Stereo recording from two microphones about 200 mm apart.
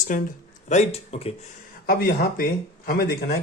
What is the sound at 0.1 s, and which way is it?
Speech, 45° left (ahead or behind).